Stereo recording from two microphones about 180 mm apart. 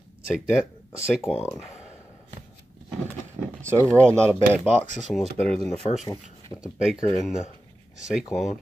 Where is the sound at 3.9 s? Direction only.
10° left (ahead or behind).